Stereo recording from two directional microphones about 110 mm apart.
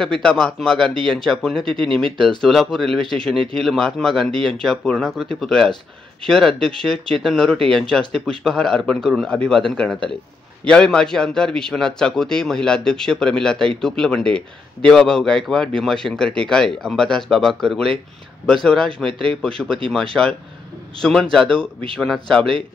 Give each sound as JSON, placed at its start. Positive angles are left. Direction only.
{"t": 0.0, "sound": "a man's voice", "side_deg": 5}
{"t": 21.0, "sound": "a man's voice", "side_deg": 5}